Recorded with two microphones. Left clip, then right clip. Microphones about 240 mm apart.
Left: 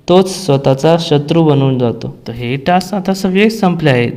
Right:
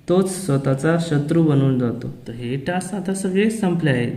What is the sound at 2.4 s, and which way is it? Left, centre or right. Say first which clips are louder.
A man's voice: left 12 dB; left.